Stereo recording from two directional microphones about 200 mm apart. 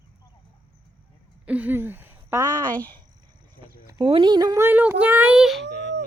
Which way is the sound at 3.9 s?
20° right (ahead or behind).